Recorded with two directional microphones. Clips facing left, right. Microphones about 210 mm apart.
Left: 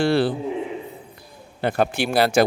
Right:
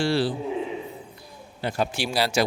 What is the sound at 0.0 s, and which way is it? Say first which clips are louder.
Speech: left 4 dB; 55° left (ahead or behind).